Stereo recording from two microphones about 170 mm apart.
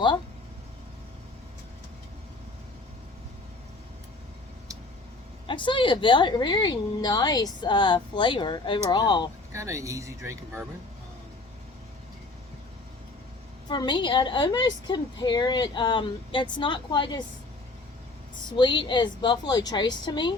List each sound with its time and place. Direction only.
5.5 s a woman's voice: 30° left (ahead or behind)
9.5 s speech: 15° right (ahead or behind)
13.7 s a woman's voice: 25° left (ahead or behind)
18.5 s a woman's voice: 30° left (ahead or behind)